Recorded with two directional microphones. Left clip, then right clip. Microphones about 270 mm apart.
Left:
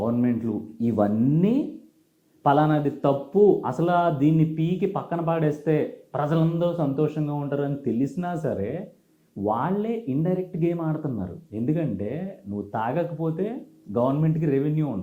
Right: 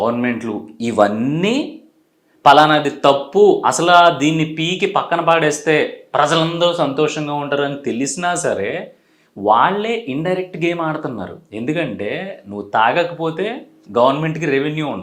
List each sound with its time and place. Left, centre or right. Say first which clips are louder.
0.0 s speech: right 7 dB; centre
3.3 s speech: right 5 dB; right
3.6 s speech: right 12 dB; centre